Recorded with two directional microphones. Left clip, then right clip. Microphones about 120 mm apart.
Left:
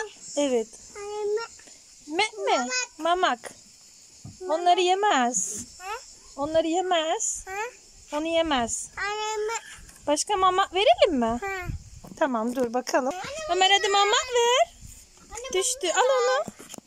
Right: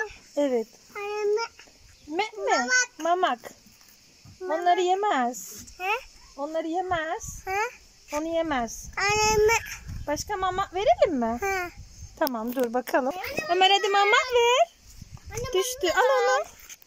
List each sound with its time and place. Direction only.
0.0 s a sound: centre (ahead or behind)
2.1 s speech: centre (ahead or behind)
5.8 s speech: 15° right (ahead or behind)
6.3 s a child's voice: 10° left (ahead or behind)
7.4 s speech: centre (ahead or behind)
8.9 s child singing: 10° right (ahead or behind)
10.0 s a child's voice: 15° left (ahead or behind)